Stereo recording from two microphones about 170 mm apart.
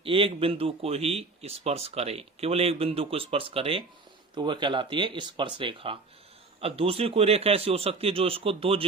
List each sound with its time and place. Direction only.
0.0 s speech: 30° right (ahead or behind)